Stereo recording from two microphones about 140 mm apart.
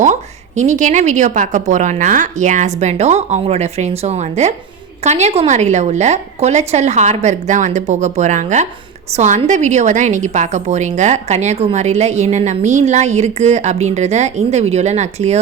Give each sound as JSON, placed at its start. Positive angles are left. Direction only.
{"t": 0.0, "sound": "a woman's voice", "side_deg": -60}